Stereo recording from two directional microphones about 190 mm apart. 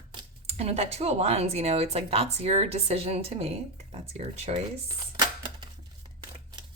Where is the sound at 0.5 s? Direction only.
35° right (ahead or behind).